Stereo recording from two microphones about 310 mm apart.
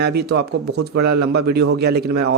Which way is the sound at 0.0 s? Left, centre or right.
Right.